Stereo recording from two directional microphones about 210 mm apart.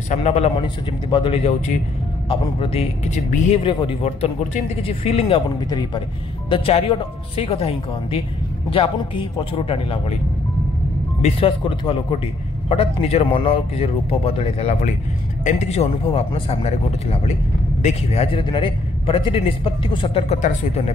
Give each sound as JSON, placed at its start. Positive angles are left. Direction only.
{"t": 0.1, "sound": "a man's voice", "side_deg": 30}
{"t": 11.2, "sound": "a man's voice", "side_deg": 25}